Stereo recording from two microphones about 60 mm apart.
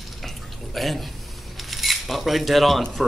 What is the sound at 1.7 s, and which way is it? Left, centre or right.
Cutlery, centre.